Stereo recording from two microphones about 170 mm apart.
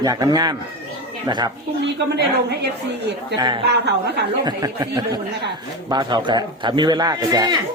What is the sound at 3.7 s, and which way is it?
Speech, 80° right.